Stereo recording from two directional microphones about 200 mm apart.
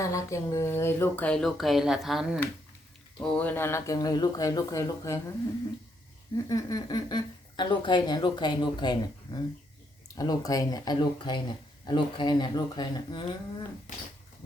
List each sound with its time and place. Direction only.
0.0 s speech: 15° left (ahead or behind)
6.3 s speech: 15° left (ahead or behind)
13.9 s speech: 40° left (ahead or behind)